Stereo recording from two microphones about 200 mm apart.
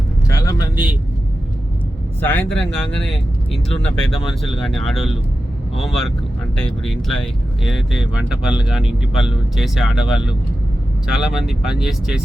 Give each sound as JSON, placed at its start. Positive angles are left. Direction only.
{"t": 0.3, "sound": "a man's voice", "side_deg": 15}
{"t": 2.2, "sound": "speech", "side_deg": 5}